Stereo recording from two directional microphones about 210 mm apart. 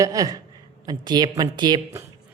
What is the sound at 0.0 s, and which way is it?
A man's voice, 15° right (ahead or behind).